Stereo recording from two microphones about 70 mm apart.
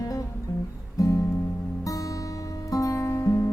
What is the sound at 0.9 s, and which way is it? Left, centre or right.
Music, left.